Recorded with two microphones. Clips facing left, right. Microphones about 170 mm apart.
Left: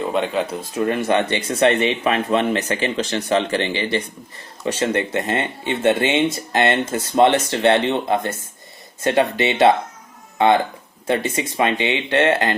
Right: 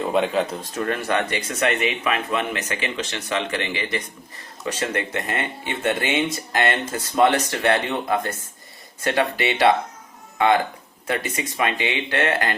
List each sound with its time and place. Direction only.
0.0 s speech: centre (ahead or behind)
0.6 s speech: 15° left (ahead or behind)